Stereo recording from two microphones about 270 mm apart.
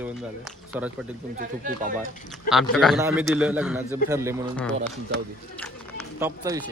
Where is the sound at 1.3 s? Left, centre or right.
Right.